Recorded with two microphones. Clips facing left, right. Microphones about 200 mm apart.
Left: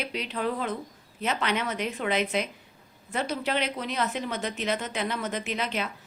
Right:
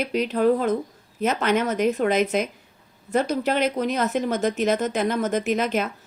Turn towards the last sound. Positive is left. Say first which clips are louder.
# right 8 dB
turn(degrees=-45)  # may be behind; listen again after turning